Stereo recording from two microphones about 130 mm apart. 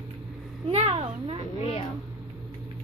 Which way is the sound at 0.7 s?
50° right (ahead or behind).